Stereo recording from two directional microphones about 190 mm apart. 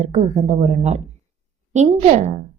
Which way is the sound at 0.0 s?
35° right (ahead or behind).